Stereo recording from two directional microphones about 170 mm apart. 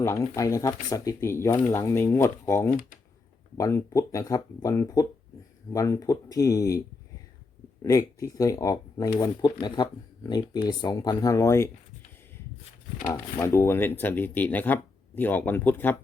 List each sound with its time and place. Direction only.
0.0 s speech: 15° left (ahead or behind)
7.9 s speech: 20° left (ahead or behind)
13.1 s speech: 15° left (ahead or behind)